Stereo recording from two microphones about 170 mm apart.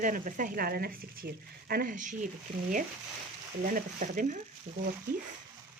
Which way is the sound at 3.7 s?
50° right (ahead or behind).